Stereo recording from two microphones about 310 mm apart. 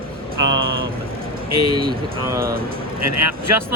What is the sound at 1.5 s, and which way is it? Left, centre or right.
Speech, right.